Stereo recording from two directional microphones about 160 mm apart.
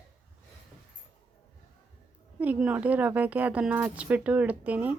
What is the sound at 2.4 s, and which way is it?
A woman's voice, 10° right (ahead or behind).